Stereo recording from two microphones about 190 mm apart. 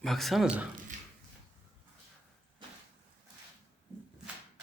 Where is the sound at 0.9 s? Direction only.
40° right (ahead or behind).